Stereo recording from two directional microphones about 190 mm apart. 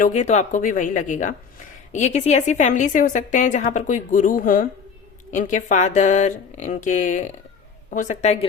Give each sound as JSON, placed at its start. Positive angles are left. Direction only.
{"t": 0.0, "sound": "a woman's voice", "side_deg": 35}